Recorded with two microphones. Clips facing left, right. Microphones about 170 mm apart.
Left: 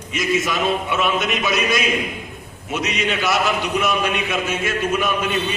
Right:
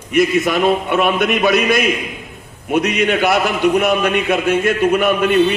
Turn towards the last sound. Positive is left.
turn(degrees=-60)  # may be behind; listen again after turning